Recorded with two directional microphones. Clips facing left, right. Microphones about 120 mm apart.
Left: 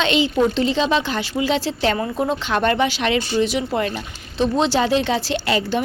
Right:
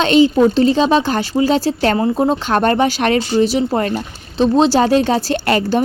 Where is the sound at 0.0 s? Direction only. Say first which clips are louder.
Right 7 dB; 40° right (ahead or behind).